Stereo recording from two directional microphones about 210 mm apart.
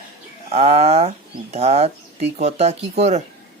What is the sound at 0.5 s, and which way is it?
Speech, 30° right (ahead or behind).